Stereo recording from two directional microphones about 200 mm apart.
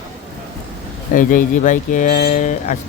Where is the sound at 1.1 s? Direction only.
40° left (ahead or behind).